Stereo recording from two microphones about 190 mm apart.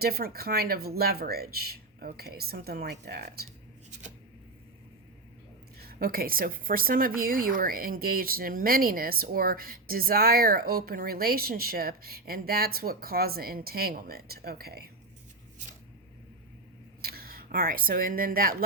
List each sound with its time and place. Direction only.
0.0 s speech: 55° right (ahead or behind)
5.9 s speech: 50° right (ahead or behind)
17.0 s speech: 55° right (ahead or behind)